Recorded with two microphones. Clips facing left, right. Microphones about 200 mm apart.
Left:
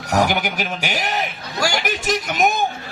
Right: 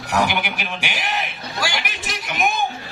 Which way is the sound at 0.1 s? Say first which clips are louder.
Left 2 dB; 45° left (ahead or behind).